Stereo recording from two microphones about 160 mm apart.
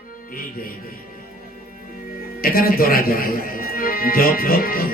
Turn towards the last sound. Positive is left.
turn(degrees=65)  # may be behind; listen again after turning